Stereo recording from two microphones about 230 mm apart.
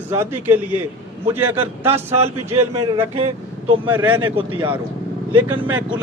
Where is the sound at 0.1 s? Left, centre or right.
Centre.